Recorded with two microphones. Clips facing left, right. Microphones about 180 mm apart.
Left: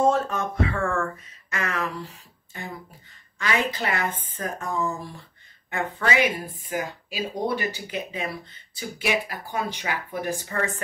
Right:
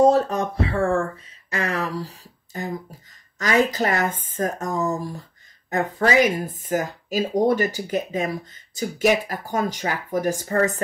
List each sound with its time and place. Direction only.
0.0 s speech: 35° right (ahead or behind)